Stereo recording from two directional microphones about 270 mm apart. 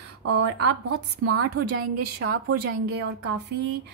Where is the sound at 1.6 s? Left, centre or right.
Right.